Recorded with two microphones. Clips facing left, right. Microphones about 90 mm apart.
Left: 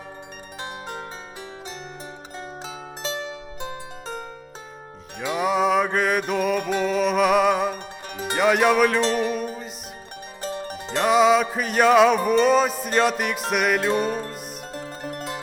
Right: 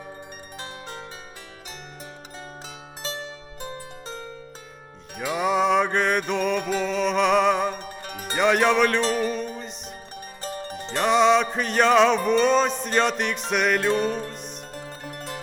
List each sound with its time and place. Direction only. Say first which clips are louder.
0.6 s zither: left 5 dB; 15° left (ahead or behind)
3.6 s harp: right 1 dB; 20° left (ahead or behind)
5.2 s music: left 1 dB; centre (ahead or behind)
8.2 s speech: left 1 dB; 5° left (ahead or behind)
9.1 s music: left 2 dB; 5° left (ahead or behind)
10.8 s music: left 1 dB; 5° left (ahead or behind)